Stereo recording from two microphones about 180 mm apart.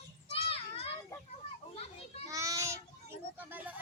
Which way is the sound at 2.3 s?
20° right (ahead or behind).